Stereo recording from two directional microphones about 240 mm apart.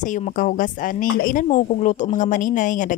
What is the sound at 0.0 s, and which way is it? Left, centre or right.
A woman's voice, left.